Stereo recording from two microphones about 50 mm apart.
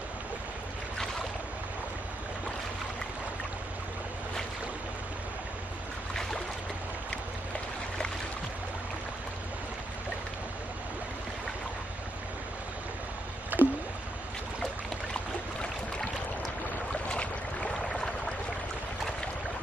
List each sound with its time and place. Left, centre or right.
13.5 s rowboat: right
17.1 s boat: centre
17.8 s a sound: centre